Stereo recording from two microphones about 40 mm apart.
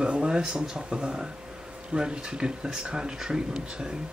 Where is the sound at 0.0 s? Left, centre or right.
Right.